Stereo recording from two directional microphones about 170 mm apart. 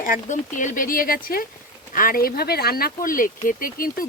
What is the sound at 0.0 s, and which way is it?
Speech, 50° left (ahead or behind).